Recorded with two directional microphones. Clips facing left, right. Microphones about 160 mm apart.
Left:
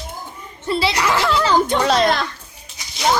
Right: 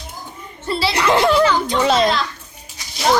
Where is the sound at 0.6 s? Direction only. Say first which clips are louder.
Left 1 dB; 20° left (ahead or behind).